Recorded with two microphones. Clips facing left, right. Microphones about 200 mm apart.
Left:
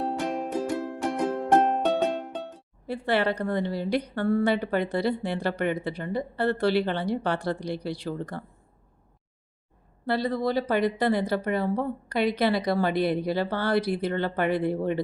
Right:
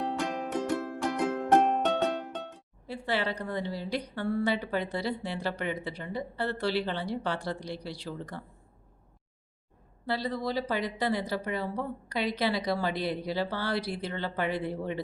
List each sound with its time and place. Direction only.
0.0 s music: 35° left (ahead or behind)
2.8 s a woman's voice: 60° left (ahead or behind)
10.1 s a woman's voice: 55° left (ahead or behind)